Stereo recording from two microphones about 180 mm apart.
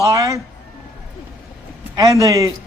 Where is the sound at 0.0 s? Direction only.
20° right (ahead or behind).